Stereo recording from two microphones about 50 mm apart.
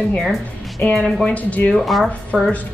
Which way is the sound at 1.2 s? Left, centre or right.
Left.